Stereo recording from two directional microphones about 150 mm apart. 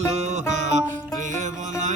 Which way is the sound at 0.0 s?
50° right (ahead or behind).